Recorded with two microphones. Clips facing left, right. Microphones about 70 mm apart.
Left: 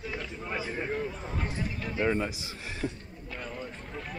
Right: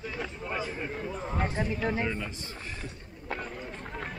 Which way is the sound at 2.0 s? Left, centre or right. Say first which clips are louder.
Left 5 dB; left.